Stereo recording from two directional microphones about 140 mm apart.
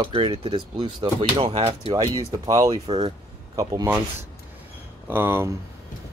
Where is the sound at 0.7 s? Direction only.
30° right (ahead or behind).